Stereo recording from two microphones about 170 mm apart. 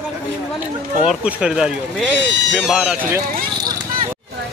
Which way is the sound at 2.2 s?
90° right.